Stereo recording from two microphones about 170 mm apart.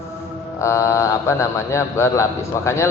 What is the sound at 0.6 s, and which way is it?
A man's voice, 15° left (ahead or behind).